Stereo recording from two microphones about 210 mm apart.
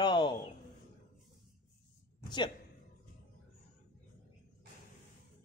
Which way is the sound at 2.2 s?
20° left (ahead or behind).